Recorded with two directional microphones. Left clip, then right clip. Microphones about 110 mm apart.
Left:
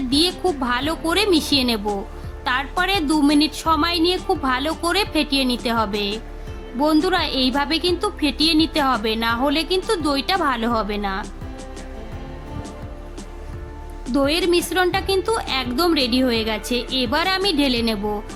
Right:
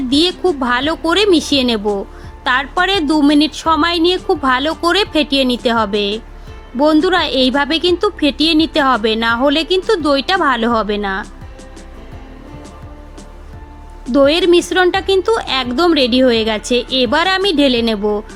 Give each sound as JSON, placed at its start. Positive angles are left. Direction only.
{"t": 0.1, "sound": "a woman's voice", "side_deg": -20}
{"t": 14.1, "sound": "a woman's voice", "side_deg": -25}